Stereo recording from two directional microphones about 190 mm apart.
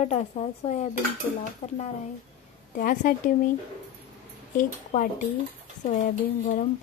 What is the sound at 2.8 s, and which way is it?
Speech, 45° left (ahead or behind).